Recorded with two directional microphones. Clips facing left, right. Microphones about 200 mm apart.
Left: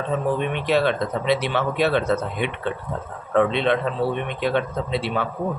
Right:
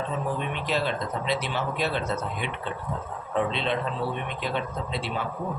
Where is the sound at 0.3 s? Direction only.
65° left (ahead or behind).